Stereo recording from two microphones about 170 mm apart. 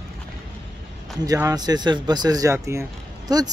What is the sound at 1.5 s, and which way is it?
Speech, 25° right (ahead or behind).